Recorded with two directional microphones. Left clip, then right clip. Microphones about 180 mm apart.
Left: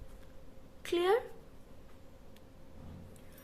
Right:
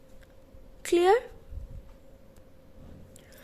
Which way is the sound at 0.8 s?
40° right (ahead or behind).